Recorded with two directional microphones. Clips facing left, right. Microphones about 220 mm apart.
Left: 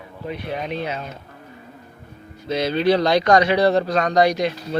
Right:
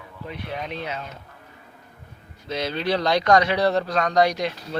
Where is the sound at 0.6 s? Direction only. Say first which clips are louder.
Left 5 dB; 10° left (ahead or behind).